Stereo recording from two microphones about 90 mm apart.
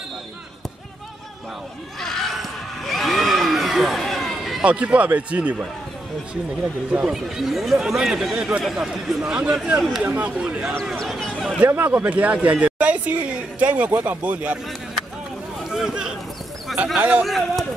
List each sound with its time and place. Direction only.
2.0 s a sound: 5° left (ahead or behind)
4.6 s speech: 15° right (ahead or behind)
7.1 s speech: 5° right (ahead or behind)
11.1 s speech: 5° left (ahead or behind)
11.6 s speech: 20° right (ahead or behind)
15.7 s a sound: 5° right (ahead or behind)
16.7 s speech: 10° right (ahead or behind)
17.2 s speech: centre (ahead or behind)